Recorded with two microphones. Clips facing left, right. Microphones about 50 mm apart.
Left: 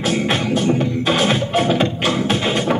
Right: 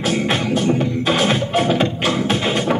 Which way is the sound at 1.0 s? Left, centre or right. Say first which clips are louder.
Even; centre.